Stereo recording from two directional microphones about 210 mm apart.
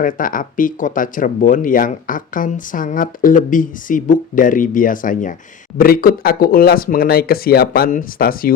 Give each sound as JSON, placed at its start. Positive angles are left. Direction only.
{"t": 0.0, "sound": "speech", "side_deg": 40}